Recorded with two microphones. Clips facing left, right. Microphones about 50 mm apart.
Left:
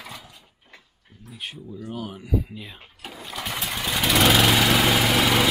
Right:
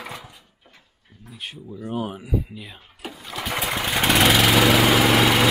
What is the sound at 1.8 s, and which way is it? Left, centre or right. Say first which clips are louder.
Speech: right 6 dB; centre.